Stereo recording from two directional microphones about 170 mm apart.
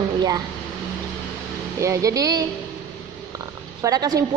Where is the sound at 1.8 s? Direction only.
20° right (ahead or behind).